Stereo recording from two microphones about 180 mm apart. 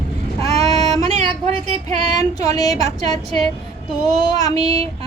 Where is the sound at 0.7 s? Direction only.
35° right (ahead or behind).